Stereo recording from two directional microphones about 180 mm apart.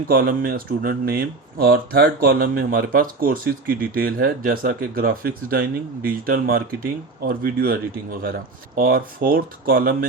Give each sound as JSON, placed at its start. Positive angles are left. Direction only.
{"t": 0.1, "sound": "speech", "side_deg": -55}